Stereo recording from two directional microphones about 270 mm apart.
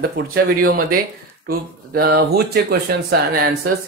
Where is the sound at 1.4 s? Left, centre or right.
Right.